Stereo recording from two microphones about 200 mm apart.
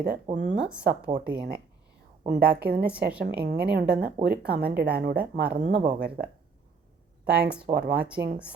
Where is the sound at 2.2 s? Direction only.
50° right (ahead or behind).